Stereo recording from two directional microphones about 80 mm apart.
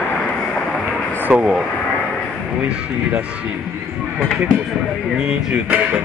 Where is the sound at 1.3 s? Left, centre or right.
Centre.